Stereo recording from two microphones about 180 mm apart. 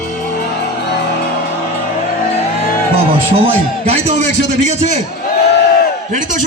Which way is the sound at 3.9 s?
40° right (ahead or behind).